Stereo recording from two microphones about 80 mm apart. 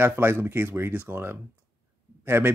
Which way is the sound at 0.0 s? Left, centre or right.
Right.